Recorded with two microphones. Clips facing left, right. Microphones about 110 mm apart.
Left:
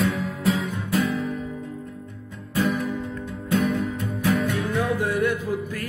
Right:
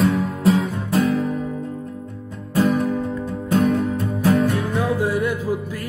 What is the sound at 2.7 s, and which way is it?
Music, 35° right (ahead or behind).